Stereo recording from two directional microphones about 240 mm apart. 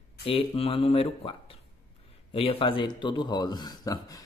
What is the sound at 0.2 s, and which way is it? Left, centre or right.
A man's voice, left.